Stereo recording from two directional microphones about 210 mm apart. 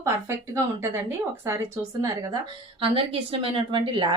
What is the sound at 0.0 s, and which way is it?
A woman's voice, 15° right (ahead or behind).